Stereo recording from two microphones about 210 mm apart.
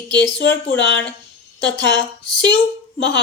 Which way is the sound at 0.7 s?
60° left (ahead or behind).